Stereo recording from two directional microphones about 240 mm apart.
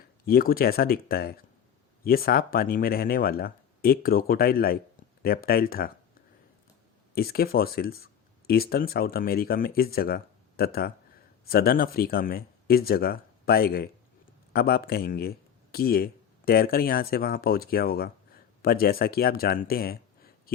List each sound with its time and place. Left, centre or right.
0.3 s speech: left
7.1 s speech: left